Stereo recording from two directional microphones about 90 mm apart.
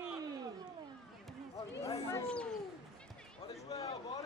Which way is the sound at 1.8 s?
35° left (ahead or behind).